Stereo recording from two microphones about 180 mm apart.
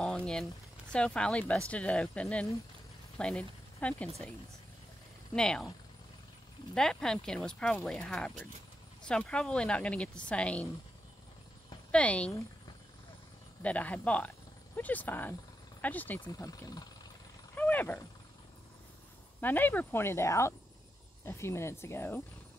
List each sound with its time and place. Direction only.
0.0 s a sound: 5° left (ahead or behind)
0.9 s speech: 5° left (ahead or behind)
5.3 s speech: 5° left (ahead or behind)
6.7 s speech: 5° left (ahead or behind)
11.9 s speech: 5° left (ahead or behind)
13.6 s speech: 10° left (ahead or behind)
16.2 s speech: 20° left (ahead or behind)
17.6 s speech: 10° left (ahead or behind)
19.4 s speech: 10° left (ahead or behind)